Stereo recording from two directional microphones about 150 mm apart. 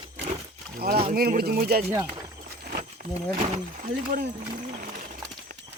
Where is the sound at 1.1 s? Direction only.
75° right (ahead or behind).